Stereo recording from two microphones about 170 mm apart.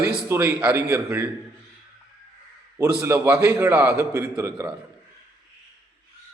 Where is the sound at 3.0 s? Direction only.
15° right (ahead or behind).